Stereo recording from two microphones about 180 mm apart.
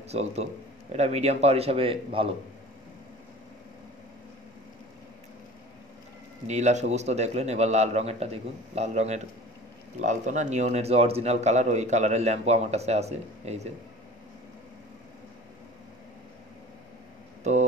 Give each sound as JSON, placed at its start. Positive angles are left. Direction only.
{"t": 0.1, "sound": "speech", "side_deg": -35}
{"t": 6.4, "sound": "speech", "side_deg": -40}
{"t": 17.4, "sound": "speech", "side_deg": -40}